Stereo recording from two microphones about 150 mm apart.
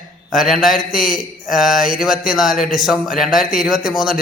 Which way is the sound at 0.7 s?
65° left (ahead or behind).